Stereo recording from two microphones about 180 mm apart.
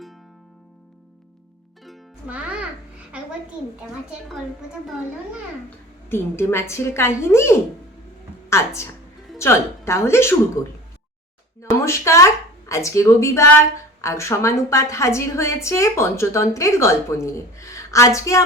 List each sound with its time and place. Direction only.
1.8 s music: 5° right (ahead or behind)
6.1 s a woman's voice: 15° left (ahead or behind)
11.6 s a woman's voice: 15° left (ahead or behind)